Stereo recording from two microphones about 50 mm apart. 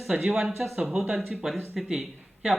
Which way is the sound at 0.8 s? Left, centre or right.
Centre.